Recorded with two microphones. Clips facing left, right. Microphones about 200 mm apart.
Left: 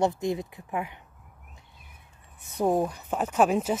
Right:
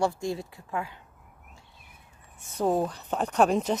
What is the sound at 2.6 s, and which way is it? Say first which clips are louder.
A woman's voice: left 1 dB; 10° left (ahead or behind).